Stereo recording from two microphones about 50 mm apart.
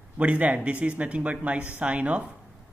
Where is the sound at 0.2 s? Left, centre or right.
Right.